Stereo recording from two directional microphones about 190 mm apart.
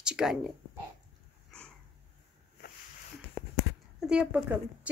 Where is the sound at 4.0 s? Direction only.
5° right (ahead or behind).